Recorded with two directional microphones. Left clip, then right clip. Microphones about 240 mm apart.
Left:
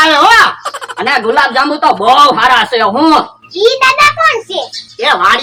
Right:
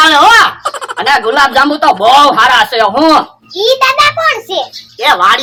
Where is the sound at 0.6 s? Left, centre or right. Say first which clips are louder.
Right 3 dB; centre.